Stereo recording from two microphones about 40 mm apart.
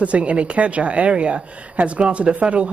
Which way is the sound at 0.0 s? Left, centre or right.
Right.